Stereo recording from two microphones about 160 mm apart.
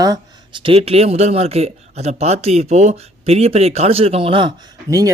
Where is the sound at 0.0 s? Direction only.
25° right (ahead or behind).